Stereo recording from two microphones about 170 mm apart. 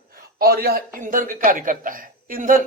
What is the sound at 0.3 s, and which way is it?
A man's voice, 60° right (ahead or behind).